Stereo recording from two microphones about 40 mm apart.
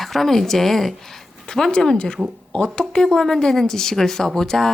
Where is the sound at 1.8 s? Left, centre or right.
Centre.